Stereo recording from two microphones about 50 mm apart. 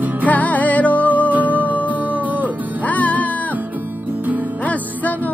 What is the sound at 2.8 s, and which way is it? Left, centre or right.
Music, left.